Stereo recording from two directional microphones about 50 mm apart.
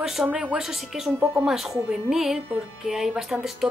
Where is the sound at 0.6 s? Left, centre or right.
Centre.